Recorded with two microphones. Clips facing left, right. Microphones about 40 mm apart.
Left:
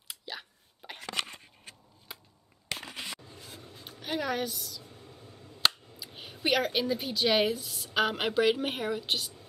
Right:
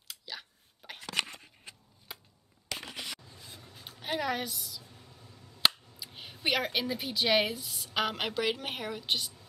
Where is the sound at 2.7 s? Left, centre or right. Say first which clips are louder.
Left 1 dB; left.